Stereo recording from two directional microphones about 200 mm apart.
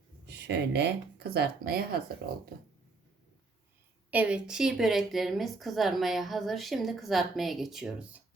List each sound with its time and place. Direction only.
0.3 s speech: 55° right (ahead or behind)
4.1 s a woman's voice: 5° right (ahead or behind)